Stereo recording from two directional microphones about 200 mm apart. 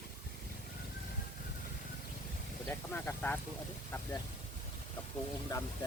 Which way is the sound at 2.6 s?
10° left (ahead or behind).